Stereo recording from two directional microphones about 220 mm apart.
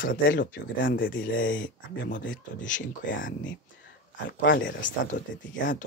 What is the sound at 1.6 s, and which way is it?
Speech, 50° left (ahead or behind).